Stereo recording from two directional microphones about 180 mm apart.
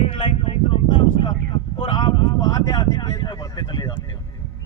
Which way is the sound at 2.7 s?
25° left (ahead or behind).